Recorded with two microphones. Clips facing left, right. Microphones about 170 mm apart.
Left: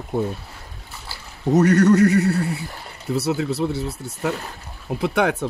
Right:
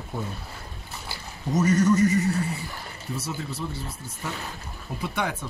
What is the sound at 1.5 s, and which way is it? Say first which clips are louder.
Speech: left 6 dB; 65° left (ahead or behind).